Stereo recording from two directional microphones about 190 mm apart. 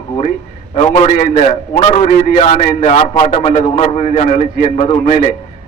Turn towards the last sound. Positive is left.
turn(degrees=35)  # may be behind; listen again after turning